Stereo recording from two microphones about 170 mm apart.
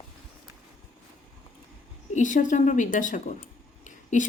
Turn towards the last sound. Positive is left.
turn(degrees=50)  # may be behind; listen again after turning